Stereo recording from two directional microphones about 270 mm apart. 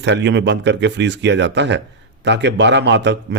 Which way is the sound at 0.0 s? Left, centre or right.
Right.